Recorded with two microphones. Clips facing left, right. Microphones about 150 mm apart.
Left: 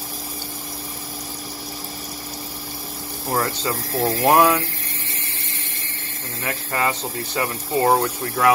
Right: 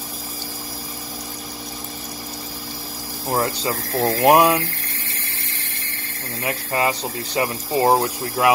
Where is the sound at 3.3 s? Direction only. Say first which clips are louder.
Right 1 dB; 25° right (ahead or behind).